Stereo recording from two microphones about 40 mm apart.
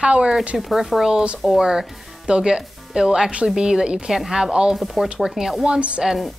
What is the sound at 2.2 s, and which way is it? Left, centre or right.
Speech, right.